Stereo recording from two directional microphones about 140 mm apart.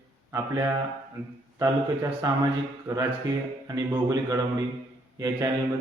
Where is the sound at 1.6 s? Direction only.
25° right (ahead or behind).